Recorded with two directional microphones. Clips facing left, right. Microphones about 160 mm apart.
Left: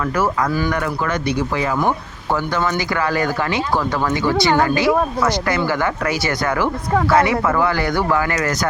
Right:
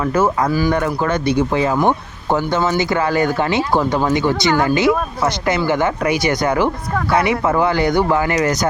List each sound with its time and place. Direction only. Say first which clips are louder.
0.7 s speech: right 3 dB; 30° right (ahead or behind)